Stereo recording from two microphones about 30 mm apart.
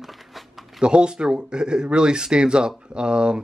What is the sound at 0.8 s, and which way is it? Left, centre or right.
Speech, right.